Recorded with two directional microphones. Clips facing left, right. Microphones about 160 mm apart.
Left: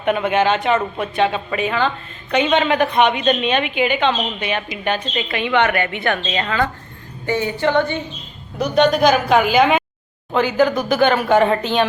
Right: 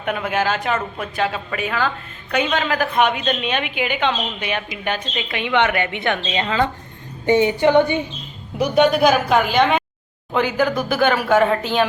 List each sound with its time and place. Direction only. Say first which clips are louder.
0.0 s a woman's voice: left 4 dB; centre (ahead or behind)
10.3 s a woman's voice: left 3 dB; 10° right (ahead or behind)